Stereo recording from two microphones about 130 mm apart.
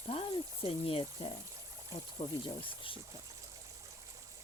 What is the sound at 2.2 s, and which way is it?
Speech, 60° left (ahead or behind).